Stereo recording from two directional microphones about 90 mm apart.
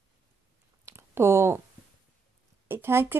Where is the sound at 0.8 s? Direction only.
30° right (ahead or behind).